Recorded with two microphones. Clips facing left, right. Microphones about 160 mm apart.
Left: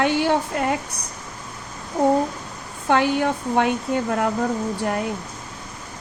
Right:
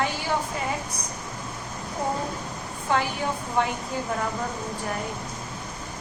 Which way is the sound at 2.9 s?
70° left (ahead or behind).